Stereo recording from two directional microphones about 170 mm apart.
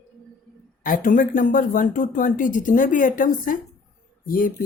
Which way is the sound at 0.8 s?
55° left (ahead or behind).